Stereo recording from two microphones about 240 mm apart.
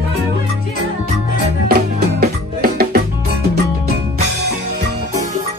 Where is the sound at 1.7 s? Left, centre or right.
Right.